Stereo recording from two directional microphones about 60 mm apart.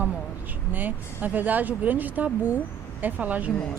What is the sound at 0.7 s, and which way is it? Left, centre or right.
Speech, right.